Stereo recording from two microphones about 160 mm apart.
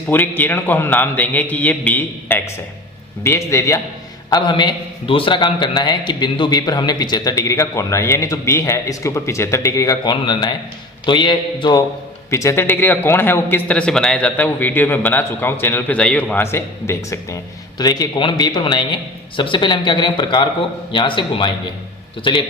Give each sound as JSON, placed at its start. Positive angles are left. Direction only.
{"t": 0.1, "sound": "a man's voice", "side_deg": 10}
{"t": 12.3, "sound": "a man's voice", "side_deg": 15}